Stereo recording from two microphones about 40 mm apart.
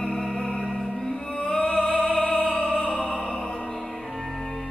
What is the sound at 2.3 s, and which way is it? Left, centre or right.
Opera, left.